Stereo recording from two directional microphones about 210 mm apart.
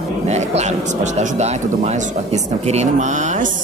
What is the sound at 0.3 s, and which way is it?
Speech, 30° right (ahead or behind).